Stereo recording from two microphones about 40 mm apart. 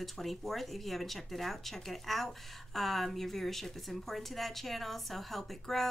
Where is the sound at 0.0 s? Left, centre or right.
Centre.